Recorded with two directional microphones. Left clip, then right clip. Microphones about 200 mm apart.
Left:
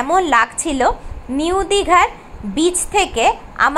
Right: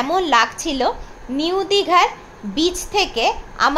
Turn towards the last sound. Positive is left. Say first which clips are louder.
# left 3 dB
turn(degrees=10)  # may be behind; listen again after turning